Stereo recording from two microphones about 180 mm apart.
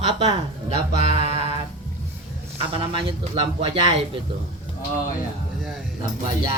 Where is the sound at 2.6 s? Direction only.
30° right (ahead or behind).